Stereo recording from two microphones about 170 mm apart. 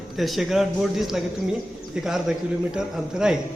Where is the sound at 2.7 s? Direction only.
5° right (ahead or behind).